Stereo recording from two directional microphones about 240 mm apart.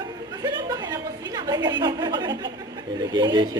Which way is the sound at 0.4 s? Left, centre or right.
Centre.